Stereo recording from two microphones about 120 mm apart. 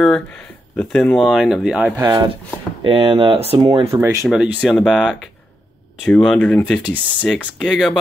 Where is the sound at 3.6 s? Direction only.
30° right (ahead or behind).